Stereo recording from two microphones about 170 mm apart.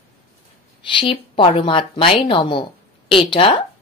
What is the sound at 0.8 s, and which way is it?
Speech, 30° left (ahead or behind).